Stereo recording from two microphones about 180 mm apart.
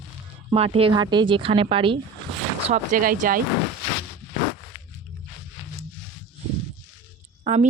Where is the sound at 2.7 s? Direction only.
50° right (ahead or behind).